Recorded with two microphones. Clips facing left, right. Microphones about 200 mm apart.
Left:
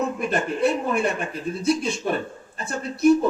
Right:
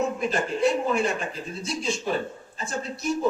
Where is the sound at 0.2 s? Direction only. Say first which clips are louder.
Left 2 dB; 60° left (ahead or behind).